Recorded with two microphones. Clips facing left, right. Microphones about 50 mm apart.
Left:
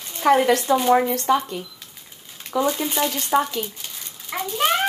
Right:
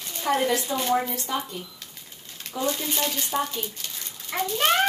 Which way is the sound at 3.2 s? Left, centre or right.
Left.